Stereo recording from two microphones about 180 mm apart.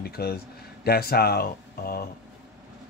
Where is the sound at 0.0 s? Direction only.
60° left (ahead or behind).